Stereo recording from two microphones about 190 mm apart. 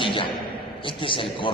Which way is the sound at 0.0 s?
25° left (ahead or behind).